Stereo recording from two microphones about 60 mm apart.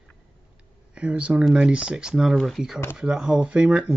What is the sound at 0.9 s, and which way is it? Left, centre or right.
Speech, right.